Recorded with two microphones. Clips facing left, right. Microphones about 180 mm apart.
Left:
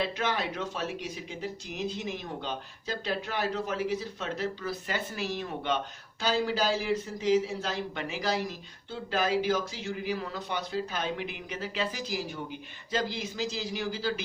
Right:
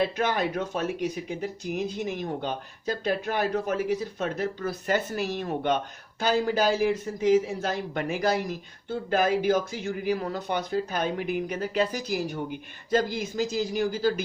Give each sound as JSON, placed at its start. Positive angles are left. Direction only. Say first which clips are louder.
{"t": 0.0, "sound": "speech", "louder": "right 5 dB", "side_deg": -50}